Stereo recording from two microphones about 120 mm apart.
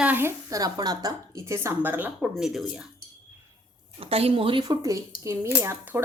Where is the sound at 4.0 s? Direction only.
55° right (ahead or behind); by 6.0 s 20° right (ahead or behind).